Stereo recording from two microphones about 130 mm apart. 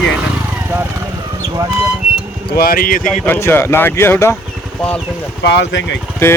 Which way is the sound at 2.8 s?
90° left.